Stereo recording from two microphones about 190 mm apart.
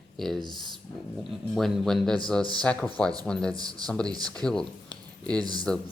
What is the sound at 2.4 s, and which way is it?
Speech, 20° right (ahead or behind).